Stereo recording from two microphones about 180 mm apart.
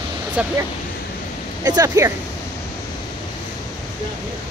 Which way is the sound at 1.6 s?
20° right (ahead or behind).